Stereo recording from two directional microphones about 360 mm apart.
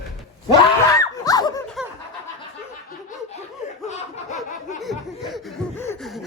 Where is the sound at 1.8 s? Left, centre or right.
Centre.